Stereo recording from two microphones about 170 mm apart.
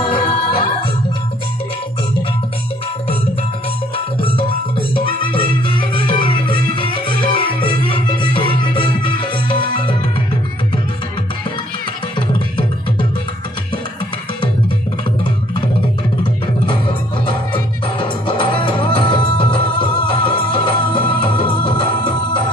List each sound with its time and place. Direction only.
0.2 s music: 30° left (ahead or behind)
3.9 s music: 30° left (ahead or behind)
17.9 s music: 30° left (ahead or behind)